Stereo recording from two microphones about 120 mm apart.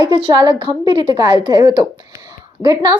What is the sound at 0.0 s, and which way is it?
Speech, 45° right (ahead or behind).